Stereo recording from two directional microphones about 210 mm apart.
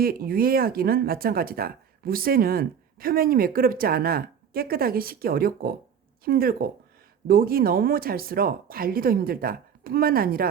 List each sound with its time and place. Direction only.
0.0 s speech: 45° right (ahead or behind)